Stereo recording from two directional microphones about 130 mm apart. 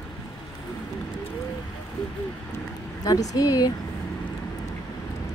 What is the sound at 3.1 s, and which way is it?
Speech, 30° left (ahead or behind).